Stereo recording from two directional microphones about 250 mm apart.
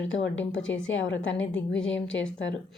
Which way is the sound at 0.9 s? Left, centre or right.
Left.